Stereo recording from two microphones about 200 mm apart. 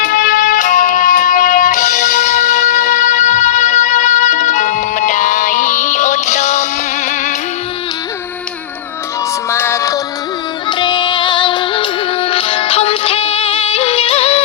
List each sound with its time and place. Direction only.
0.0 s music: 45° left (ahead or behind)
9.5 s music: 15° left (ahead or behind); by 14.4 s 30° left (ahead or behind)